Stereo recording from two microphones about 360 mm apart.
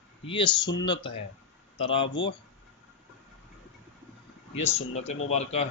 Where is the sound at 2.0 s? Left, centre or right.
Left.